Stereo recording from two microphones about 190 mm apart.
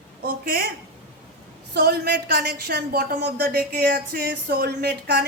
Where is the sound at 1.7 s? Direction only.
60° right (ahead or behind).